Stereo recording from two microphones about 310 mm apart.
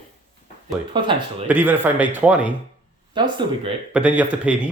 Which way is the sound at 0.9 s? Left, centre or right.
Centre.